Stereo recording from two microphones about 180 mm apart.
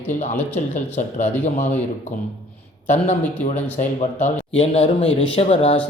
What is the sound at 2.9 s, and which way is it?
A man's voice, 40° left (ahead or behind).